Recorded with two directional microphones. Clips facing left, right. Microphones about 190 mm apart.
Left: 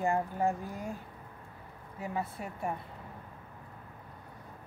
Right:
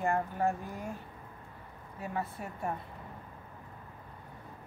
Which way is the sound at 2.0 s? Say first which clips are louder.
Left 1 dB; 15° left (ahead or behind).